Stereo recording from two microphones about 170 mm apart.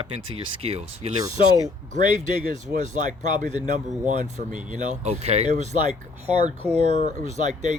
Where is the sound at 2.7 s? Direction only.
45° right (ahead or behind).